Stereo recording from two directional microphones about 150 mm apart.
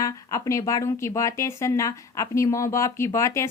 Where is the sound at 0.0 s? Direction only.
20° left (ahead or behind).